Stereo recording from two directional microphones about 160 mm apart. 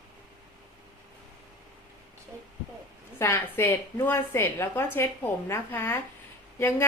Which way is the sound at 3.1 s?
15° left (ahead or behind).